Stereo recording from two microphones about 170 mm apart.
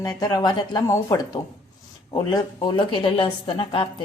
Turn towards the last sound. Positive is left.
turn(degrees=30)  # may be behind; listen again after turning